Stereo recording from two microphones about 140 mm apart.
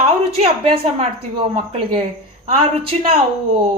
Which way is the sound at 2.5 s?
40° right (ahead or behind).